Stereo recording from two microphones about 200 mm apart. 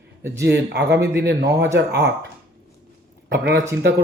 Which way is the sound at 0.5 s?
55° right (ahead or behind).